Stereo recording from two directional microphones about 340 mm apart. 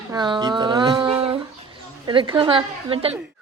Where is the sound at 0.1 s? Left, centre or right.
Centre.